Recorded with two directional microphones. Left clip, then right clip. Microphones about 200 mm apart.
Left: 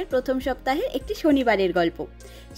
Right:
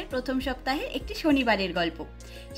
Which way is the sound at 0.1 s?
45° left (ahead or behind).